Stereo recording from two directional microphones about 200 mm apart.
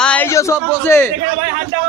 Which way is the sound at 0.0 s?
10° left (ahead or behind).